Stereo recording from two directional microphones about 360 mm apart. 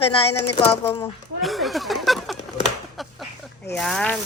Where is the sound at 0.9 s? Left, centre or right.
Centre.